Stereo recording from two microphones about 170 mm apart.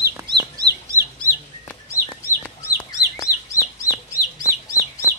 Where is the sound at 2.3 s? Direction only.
15° left (ahead or behind).